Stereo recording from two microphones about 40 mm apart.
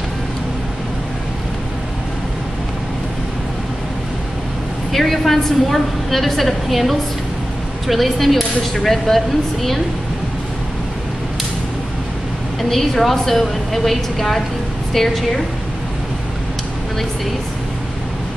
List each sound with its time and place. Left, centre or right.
4.9 s a woman's voice: centre
12.6 s a woman's voice: centre